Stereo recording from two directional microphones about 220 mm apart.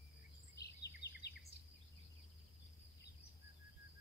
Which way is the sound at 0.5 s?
50° left (ahead or behind).